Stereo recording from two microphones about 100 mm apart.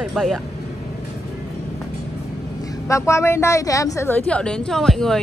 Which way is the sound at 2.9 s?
30° left (ahead or behind).